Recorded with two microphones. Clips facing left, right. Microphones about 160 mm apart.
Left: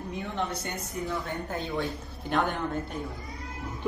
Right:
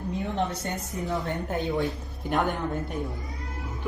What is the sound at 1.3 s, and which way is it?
Speech, 20° right (ahead or behind).